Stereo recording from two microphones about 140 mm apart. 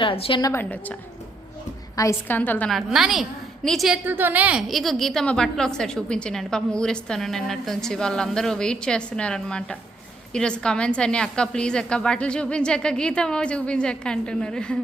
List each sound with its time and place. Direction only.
0.0 s a woman's voice: 40° left (ahead or behind)
0.4 s a woman's voice: 15° left (ahead or behind)
2.0 s a woman's voice: 15° left (ahead or behind); by 4.0 s centre (ahead or behind)
4.0 s a woman's voice: 15° right (ahead or behind); by 14.8 s 5° left (ahead or behind)